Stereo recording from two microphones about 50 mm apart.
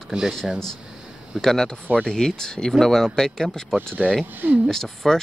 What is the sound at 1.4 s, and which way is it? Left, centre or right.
Speech, centre.